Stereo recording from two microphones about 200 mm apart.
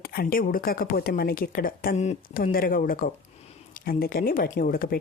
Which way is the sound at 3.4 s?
30° left (ahead or behind).